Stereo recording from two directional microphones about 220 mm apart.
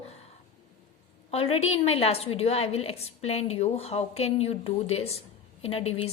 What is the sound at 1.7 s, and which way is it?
A woman's voice, 25° left (ahead or behind).